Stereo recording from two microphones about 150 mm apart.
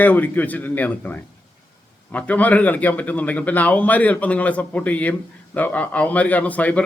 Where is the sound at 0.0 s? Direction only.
10° left (ahead or behind).